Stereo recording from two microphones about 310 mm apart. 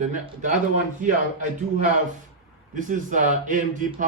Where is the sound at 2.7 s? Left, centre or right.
Right.